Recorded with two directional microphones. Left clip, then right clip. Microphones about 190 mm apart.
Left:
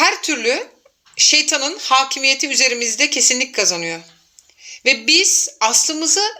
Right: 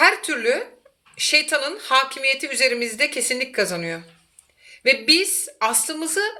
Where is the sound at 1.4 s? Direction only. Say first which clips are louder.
Left 3 dB; 30° left (ahead or behind).